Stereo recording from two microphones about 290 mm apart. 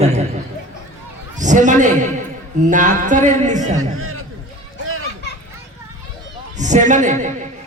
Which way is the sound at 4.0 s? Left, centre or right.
Right.